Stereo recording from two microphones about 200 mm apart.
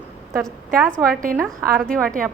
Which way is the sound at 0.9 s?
5° left (ahead or behind).